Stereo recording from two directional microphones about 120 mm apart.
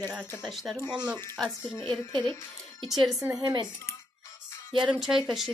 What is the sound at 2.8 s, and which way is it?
Speech, centre (ahead or behind).